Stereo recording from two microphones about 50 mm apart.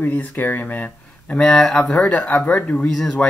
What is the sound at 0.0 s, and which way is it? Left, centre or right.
Speech, left.